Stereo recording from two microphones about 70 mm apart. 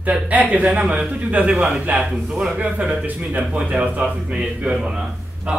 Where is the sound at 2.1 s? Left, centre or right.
Centre.